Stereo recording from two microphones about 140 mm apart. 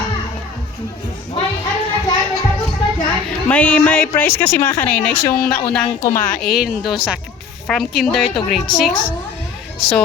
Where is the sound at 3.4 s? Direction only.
10° left (ahead or behind).